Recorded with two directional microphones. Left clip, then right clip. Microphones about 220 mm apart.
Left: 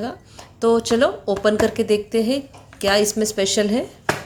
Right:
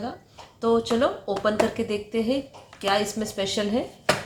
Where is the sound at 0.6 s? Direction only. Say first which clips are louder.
Left 5 dB; 50° left (ahead or behind).